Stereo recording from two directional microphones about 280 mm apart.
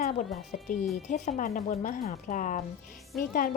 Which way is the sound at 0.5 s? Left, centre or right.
Left.